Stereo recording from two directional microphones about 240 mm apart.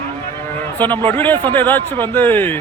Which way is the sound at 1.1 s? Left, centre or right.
Centre.